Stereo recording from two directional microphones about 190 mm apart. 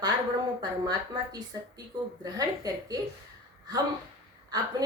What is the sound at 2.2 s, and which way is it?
Speech, 20° right (ahead or behind).